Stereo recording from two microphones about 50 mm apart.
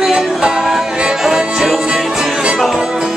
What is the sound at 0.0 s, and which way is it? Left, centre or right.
Music, centre.